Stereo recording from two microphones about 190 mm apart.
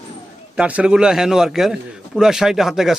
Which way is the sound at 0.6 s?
5° right (ahead or behind).